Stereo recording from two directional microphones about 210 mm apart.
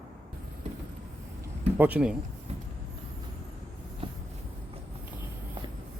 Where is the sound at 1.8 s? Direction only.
5° right (ahead or behind).